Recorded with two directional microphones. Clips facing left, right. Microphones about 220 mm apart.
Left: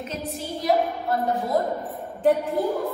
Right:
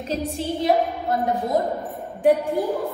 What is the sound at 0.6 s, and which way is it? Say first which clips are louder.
Speech: right 1 dB; 25° right (ahead or behind).